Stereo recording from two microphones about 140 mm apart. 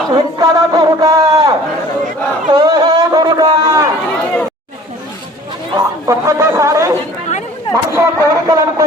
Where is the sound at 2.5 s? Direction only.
30° right (ahead or behind).